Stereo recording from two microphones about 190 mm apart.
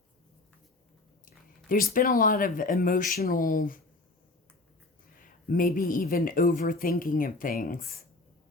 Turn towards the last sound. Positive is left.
turn(degrees=50)  # may be behind; listen again after turning